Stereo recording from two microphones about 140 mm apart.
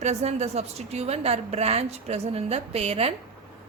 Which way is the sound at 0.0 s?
50° right (ahead or behind).